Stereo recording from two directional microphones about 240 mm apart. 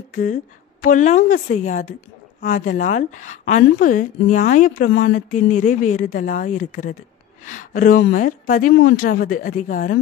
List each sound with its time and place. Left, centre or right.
0.1 s a woman's voice: left